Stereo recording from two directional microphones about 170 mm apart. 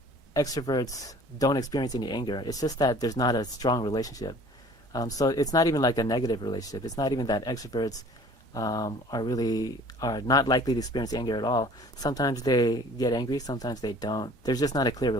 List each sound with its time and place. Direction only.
0.3 s speech: 20° left (ahead or behind)